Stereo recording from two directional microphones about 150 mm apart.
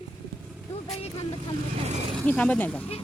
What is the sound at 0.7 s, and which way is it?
Vehicle, 40° left (ahead or behind).